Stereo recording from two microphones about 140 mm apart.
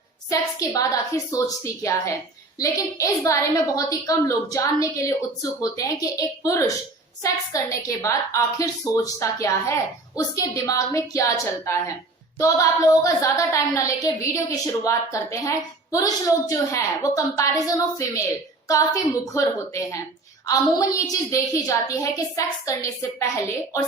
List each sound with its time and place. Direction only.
0.3 s a woman's voice: 25° left (ahead or behind)